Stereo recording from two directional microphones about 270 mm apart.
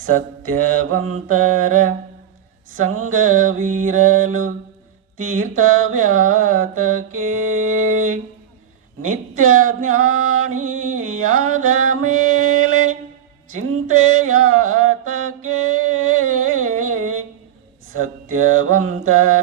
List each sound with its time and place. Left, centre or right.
0.5 s mantra: right
2.8 s music: right
9.0 s speech: right
9.6 s music: right